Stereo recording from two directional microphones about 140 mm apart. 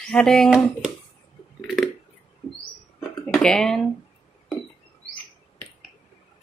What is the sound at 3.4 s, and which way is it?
Speech, 5° left (ahead or behind).